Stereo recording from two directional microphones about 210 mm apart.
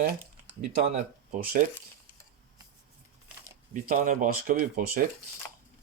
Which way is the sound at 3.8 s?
40° right (ahead or behind).